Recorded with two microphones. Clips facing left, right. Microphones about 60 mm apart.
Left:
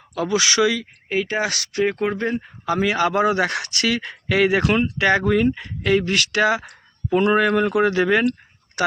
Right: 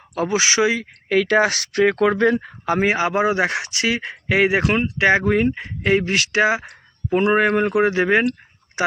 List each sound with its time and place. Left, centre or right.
0.1 s speech: right
1.1 s speech: right
1.4 s speech: right
1.7 s speech: right
2.6 s speech: right
3.0 s speech: right